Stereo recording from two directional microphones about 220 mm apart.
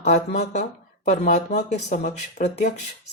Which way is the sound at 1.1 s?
30° left (ahead or behind).